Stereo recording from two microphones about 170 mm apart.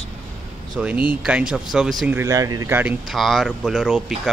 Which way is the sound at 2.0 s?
15° right (ahead or behind).